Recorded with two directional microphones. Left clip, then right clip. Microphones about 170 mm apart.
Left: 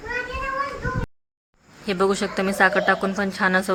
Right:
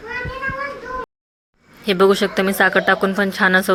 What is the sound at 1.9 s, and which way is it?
Speech, 20° right (ahead or behind).